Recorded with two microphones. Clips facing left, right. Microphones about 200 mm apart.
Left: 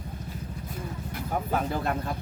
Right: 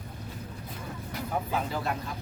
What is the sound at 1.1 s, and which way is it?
Speech, 55° left (ahead or behind).